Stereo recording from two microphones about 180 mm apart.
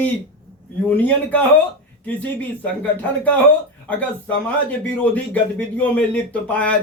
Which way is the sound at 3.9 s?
10° left (ahead or behind).